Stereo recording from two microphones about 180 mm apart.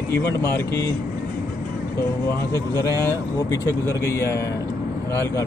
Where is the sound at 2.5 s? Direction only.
15° left (ahead or behind).